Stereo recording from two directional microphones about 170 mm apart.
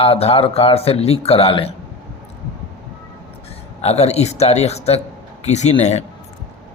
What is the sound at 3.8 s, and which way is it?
Speech, 40° left (ahead or behind).